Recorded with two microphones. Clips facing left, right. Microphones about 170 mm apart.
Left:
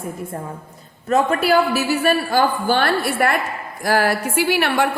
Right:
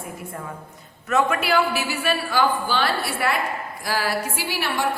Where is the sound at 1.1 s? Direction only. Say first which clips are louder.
Left 4 dB; 35° left (ahead or behind).